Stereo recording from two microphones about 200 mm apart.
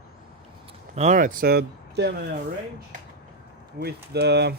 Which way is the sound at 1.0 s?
40° right (ahead or behind).